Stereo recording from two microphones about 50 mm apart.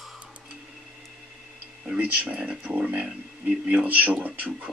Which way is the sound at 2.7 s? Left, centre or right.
Right.